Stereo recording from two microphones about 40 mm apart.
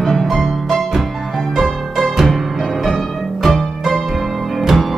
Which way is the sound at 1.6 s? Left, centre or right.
Centre.